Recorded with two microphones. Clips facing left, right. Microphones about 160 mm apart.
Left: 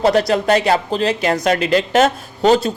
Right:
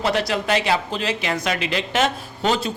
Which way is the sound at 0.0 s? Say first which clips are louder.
Left 7 dB; 40° left (ahead or behind).